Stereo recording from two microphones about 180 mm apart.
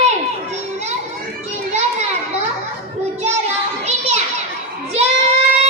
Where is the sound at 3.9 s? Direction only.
35° right (ahead or behind).